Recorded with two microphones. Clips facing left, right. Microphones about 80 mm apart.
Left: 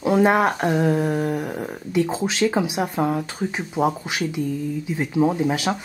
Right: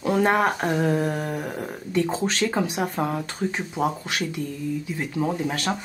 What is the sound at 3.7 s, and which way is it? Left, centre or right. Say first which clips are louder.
Speech: left 3 dB; centre.